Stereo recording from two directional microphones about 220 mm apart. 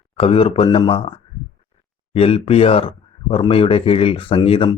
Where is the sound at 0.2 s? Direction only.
25° left (ahead or behind).